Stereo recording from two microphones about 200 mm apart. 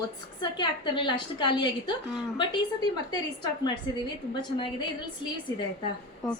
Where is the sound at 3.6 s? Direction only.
25° left (ahead or behind).